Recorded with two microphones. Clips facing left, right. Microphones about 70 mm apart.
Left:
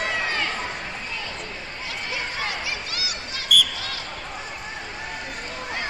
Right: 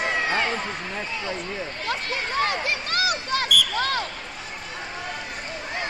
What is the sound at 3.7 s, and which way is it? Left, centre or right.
Basketball bounce, right.